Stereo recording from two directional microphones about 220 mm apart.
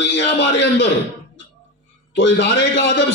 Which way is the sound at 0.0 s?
55° left (ahead or behind).